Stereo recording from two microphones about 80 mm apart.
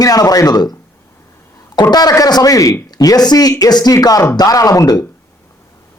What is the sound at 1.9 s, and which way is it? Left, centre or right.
Speech, left.